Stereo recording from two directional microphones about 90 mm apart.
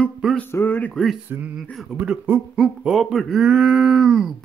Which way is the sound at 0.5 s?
25° left (ahead or behind).